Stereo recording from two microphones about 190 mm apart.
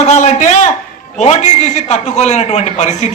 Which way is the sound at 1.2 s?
35° left (ahead or behind).